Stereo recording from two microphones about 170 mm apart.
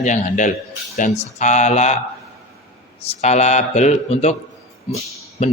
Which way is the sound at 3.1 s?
40° left (ahead or behind).